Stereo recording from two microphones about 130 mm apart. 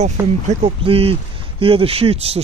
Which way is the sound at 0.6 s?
45° right (ahead or behind).